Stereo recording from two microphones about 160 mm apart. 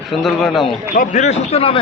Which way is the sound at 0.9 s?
55° left (ahead or behind).